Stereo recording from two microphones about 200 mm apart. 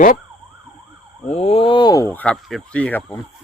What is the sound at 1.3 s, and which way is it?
Speech, 30° left (ahead or behind).